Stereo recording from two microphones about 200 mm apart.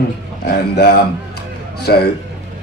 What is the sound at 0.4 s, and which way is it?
A man's voice, 55° left (ahead or behind).